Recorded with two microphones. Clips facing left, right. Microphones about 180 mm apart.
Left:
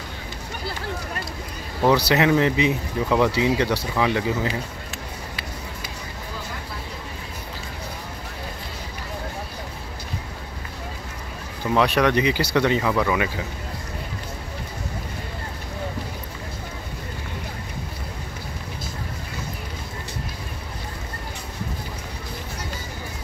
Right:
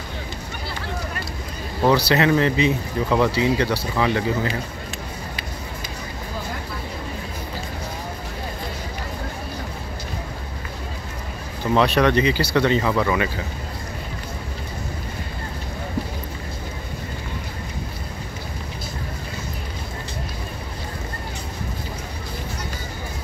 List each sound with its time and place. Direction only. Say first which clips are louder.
1.9 s speech: even; 20° left (ahead or behind)
11.7 s speech: right 2 dB; 10° left (ahead or behind)